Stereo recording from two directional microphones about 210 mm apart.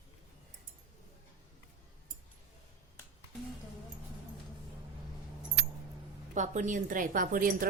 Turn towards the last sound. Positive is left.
turn(degrees=-40)  # may be behind; listen again after turning